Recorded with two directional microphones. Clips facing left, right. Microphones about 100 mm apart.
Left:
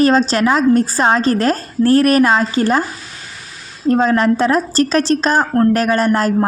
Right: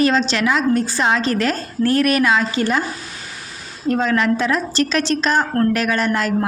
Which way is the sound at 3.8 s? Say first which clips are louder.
Left 4 dB; 35° left (ahead or behind).